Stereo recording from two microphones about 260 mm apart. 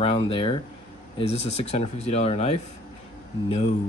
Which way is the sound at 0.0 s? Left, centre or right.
Left.